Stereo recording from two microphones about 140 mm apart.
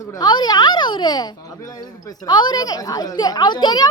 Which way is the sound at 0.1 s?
30° left (ahead or behind).